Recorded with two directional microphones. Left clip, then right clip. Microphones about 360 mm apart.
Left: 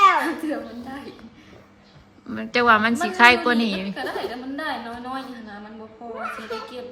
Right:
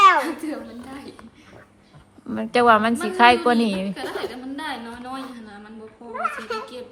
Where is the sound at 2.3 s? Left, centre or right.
Centre.